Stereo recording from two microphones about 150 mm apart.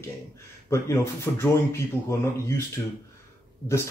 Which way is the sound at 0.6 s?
20° left (ahead or behind).